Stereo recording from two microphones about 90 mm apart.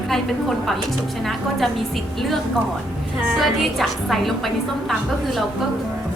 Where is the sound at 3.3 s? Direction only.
Centre (ahead or behind).